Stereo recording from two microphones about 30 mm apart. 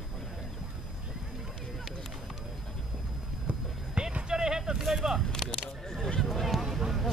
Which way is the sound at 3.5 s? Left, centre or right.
Right.